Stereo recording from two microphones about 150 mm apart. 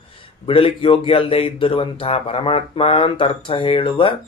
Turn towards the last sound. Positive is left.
turn(degrees=35)  # may be behind; listen again after turning